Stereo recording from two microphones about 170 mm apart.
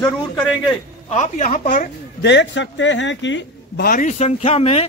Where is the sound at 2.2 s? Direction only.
90° left.